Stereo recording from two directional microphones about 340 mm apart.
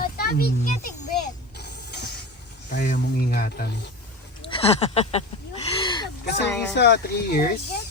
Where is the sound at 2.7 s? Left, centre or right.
Left.